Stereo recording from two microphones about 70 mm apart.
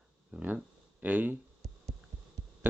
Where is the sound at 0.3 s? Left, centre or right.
Centre.